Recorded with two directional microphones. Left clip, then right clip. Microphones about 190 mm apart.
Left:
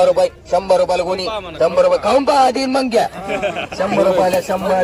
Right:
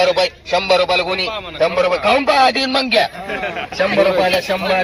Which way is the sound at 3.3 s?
55° left (ahead or behind).